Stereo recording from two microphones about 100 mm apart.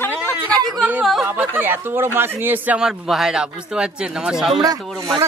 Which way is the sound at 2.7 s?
5° right (ahead or behind).